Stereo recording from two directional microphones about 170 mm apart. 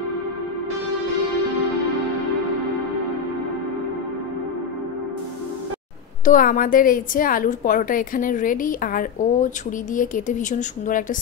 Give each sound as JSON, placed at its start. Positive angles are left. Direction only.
{"t": 6.2, "sound": "a woman's voice", "side_deg": 50}